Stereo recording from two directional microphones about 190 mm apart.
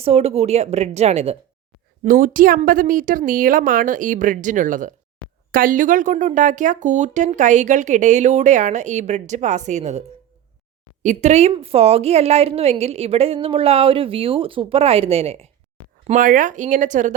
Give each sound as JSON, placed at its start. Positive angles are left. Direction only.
{"t": 0.0, "sound": "speech", "side_deg": -30}
{"t": 2.0, "sound": "a woman's voice", "side_deg": -45}
{"t": 11.0, "sound": "speech", "side_deg": -40}
{"t": 16.0, "sound": "speech", "side_deg": -45}